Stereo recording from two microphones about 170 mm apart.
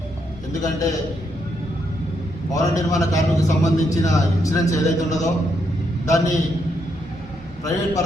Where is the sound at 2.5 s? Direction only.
20° left (ahead or behind).